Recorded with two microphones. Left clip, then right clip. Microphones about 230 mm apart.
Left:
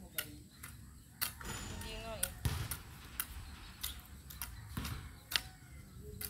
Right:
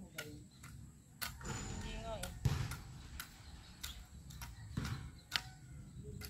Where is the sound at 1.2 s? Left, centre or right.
Left.